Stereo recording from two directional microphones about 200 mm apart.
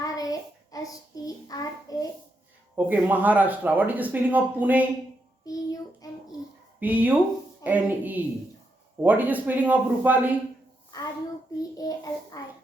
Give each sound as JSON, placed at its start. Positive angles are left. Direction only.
{"t": 0.0, "sound": "child singing", "side_deg": 15}
{"t": 2.7, "sound": "speech", "side_deg": -10}
{"t": 5.5, "sound": "child singing", "side_deg": 20}
{"t": 6.7, "sound": "speech", "side_deg": -10}
{"t": 11.8, "sound": "a child's voice", "side_deg": 20}